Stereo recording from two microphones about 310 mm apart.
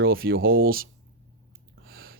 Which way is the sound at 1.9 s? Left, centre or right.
Right.